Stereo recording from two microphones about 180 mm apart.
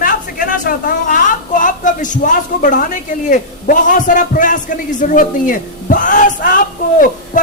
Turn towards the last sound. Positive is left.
turn(degrees=50)  # may be behind; listen again after turning